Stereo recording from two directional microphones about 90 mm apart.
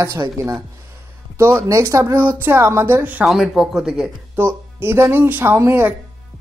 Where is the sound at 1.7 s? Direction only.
30° right (ahead or behind).